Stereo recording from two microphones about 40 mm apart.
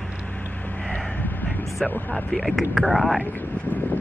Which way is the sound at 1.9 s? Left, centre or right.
Left.